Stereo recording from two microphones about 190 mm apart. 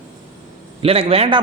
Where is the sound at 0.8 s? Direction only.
30° right (ahead or behind).